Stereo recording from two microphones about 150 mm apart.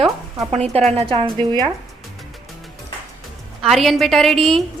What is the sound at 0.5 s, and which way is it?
A woman's voice, 45° right (ahead or behind).